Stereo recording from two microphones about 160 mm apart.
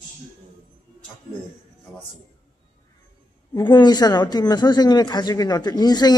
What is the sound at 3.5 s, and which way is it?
Speech, 25° left (ahead or behind).